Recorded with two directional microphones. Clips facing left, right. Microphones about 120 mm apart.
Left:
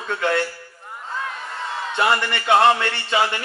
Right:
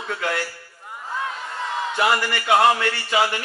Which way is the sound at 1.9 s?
25° left (ahead or behind).